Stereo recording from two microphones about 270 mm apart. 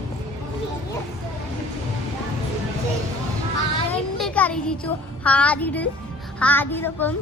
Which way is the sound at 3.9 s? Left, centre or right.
Centre.